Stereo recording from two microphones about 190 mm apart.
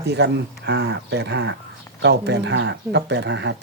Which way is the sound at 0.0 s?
60° right (ahead or behind).